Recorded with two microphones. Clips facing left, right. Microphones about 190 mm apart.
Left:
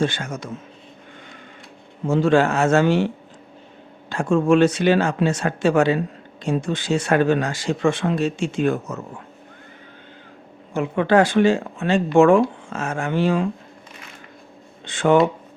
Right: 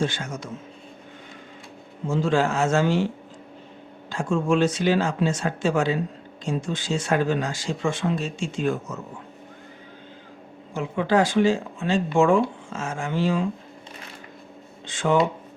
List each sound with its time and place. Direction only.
0.0 s speech: 60° left (ahead or behind)
2.0 s speech: 65° left (ahead or behind)
4.1 s speech: 65° left (ahead or behind)
10.8 s speech: 65° left (ahead or behind)
14.8 s speech: 65° left (ahead or behind)